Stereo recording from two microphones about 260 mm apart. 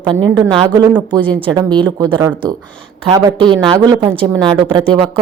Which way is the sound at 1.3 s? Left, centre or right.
Centre.